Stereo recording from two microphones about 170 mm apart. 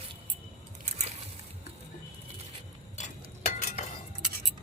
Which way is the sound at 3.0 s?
45° left (ahead or behind).